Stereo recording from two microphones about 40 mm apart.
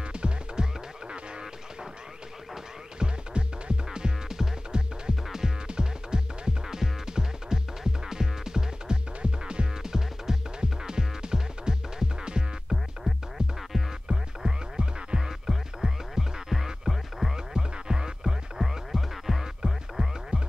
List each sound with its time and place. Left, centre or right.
0.1 s music: right
3.0 s music: right
9.8 s music: centre
14.0 s music: right; by 17.3 s centre
17.6 s music: centre
18.6 s music: centre